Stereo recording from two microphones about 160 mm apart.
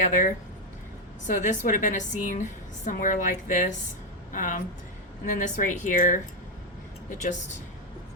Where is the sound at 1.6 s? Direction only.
55° left (ahead or behind).